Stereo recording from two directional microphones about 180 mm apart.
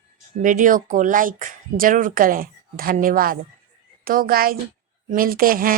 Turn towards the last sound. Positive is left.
turn(degrees=-50)  # may be behind; listen again after turning